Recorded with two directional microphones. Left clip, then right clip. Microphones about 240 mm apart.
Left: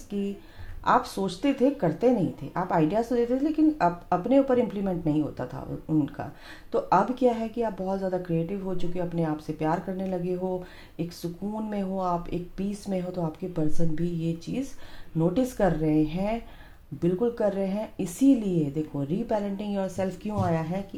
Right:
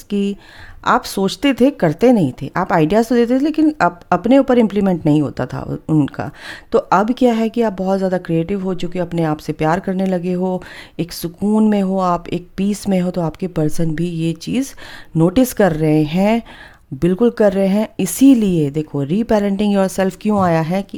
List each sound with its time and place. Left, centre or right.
0.1 s speech: right